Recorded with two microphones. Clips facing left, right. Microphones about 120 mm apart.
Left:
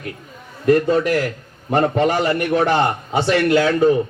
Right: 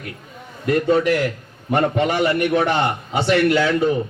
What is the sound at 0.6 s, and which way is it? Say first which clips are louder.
A man's voice: left 2 dB; 40° left (ahead or behind).